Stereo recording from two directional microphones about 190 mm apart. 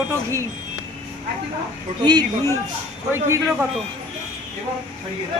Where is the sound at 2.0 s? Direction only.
20° right (ahead or behind).